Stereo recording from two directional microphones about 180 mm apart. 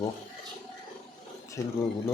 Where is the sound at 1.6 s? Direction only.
15° left (ahead or behind).